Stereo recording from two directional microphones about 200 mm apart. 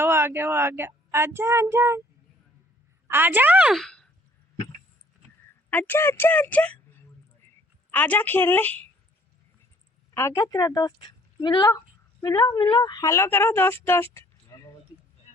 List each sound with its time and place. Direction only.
0.0 s speech: 10° right (ahead or behind)
3.1 s a woman's voice: 10° right (ahead or behind)
4.5 s a sound: 25° left (ahead or behind)
5.7 s speech: 10° left (ahead or behind)
7.4 s a sound: 10° left (ahead or behind)
10.2 s a woman's voice: 15° left (ahead or behind)